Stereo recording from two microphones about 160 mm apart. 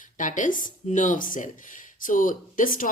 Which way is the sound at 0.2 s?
55° left (ahead or behind).